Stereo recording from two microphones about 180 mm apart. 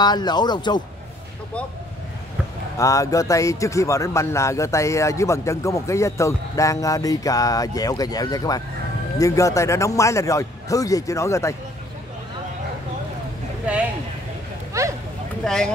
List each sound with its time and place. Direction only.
0.0 s speech: 25° left (ahead or behind)
2.8 s speech: 20° left (ahead or behind)
14.7 s a sound: 15° right (ahead or behind)
15.4 s speech: 5° left (ahead or behind)